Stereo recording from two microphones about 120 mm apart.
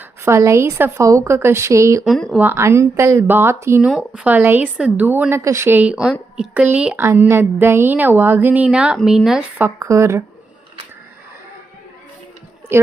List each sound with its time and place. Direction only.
0.0 s a woman's voice: 20° right (ahead or behind)
2.0 s speech: 5° left (ahead or behind)
2.3 s a woman's voice: 15° right (ahead or behind)
3.8 s a woman's voice: 5° right (ahead or behind)
9.6 s a woman's voice: 20° right (ahead or behind)
12.7 s a woman's voice: 20° right (ahead or behind)